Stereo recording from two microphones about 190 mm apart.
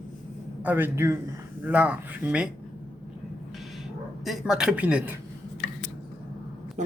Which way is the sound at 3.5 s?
Centre (ahead or behind).